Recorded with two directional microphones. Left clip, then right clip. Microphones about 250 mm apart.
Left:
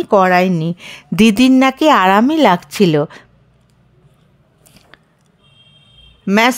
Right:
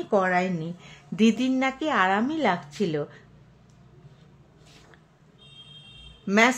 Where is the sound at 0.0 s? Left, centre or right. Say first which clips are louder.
Left 12 dB; left.